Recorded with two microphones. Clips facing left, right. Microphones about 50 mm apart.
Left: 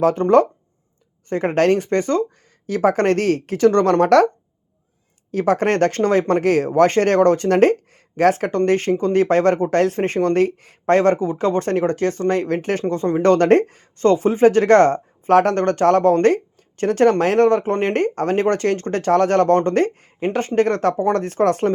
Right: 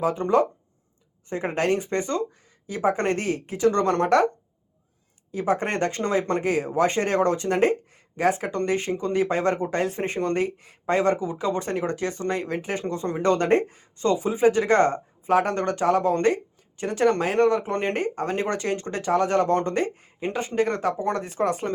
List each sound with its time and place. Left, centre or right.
0.0 s speech: left
2.6 s speech: left
5.3 s speech: left
20.6 s speech: left